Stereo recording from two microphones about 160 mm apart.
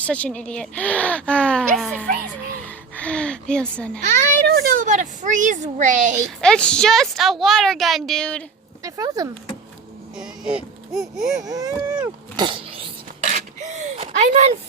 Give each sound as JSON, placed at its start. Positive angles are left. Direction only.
{"t": 0.0, "sound": "speech", "side_deg": 10}
{"t": 2.6, "sound": "a sound", "side_deg": 10}
{"t": 4.4, "sound": "speech", "side_deg": -70}
{"t": 6.4, "sound": "a woman's voice", "side_deg": 5}
{"t": 8.8, "sound": "speech", "side_deg": -20}
{"t": 10.2, "sound": "a woman's voice", "side_deg": -5}
{"t": 11.4, "sound": "speech", "side_deg": -20}
{"t": 12.4, "sound": "dog", "side_deg": -35}
{"t": 13.2, "sound": "a sound", "side_deg": -50}